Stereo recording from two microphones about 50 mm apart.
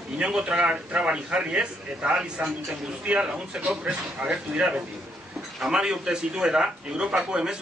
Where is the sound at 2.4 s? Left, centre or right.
Right.